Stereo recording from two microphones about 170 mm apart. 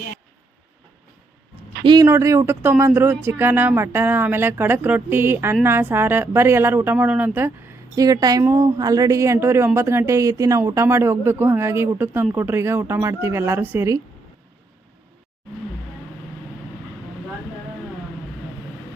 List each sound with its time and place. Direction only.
1.8 s speech: 25° right (ahead or behind)
2.0 s speech: 15° right (ahead or behind)